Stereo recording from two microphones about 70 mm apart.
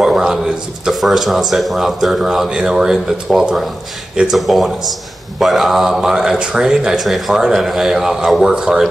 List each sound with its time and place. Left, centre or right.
0.0 s speech: centre